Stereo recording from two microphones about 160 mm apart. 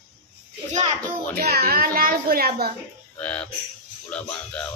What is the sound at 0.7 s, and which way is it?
Speech, 45° right (ahead or behind).